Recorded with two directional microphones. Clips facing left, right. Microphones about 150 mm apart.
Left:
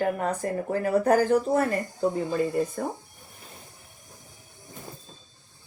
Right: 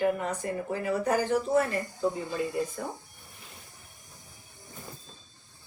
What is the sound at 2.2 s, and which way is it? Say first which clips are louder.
Speech: left 5 dB; 50° left (ahead or behind).